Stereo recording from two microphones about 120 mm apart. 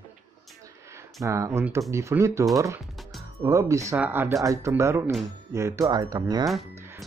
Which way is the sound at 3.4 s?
25° right (ahead or behind).